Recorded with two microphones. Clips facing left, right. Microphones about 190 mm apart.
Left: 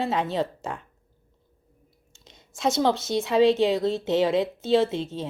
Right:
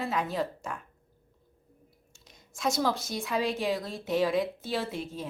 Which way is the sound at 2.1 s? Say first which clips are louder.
Left 5 dB; 25° left (ahead or behind).